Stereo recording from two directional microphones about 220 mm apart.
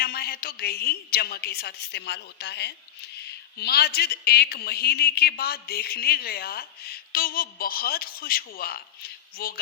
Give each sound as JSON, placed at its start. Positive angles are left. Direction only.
{"t": 0.0, "sound": "speech", "side_deg": 45}